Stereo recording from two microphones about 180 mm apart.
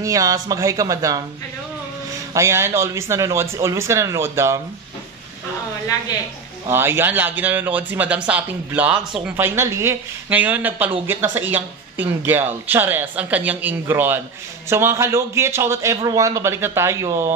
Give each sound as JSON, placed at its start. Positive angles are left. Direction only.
{"t": 0.0, "sound": "speech", "side_deg": -20}
{"t": 2.3, "sound": "a man's voice", "side_deg": -15}
{"t": 6.7, "sound": "a man's voice", "side_deg": -15}